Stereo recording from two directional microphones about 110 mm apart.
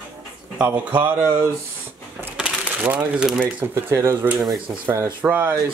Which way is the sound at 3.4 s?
20° right (ahead or behind).